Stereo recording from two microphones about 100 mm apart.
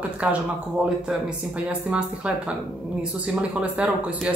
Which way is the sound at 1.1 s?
10° right (ahead or behind).